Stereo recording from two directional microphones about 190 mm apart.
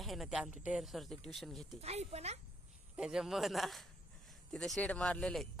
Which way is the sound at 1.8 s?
35° right (ahead or behind).